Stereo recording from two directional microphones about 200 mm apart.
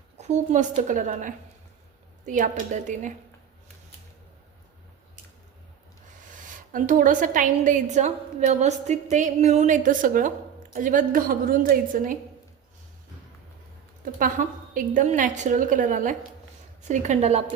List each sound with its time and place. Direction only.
0.2 s a woman's voice: 35° right (ahead or behind)
6.7 s a woman's voice: 40° right (ahead or behind)
14.0 s a woman's voice: 45° right (ahead or behind)